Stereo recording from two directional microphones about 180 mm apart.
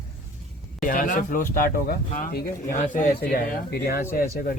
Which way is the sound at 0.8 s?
50° left (ahead or behind).